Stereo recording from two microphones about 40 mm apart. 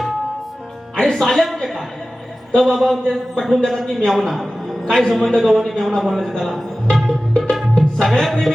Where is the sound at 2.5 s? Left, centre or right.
Centre.